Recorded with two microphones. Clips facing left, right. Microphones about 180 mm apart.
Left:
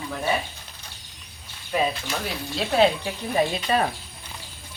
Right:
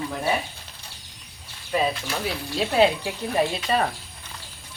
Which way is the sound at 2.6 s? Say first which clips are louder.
Even; 10° right (ahead or behind).